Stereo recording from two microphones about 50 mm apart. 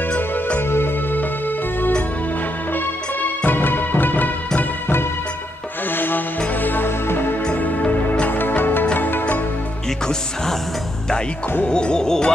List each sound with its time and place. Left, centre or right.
0.6 s music: left
2.7 s music: left
7.8 s music: left
11.6 s music: centre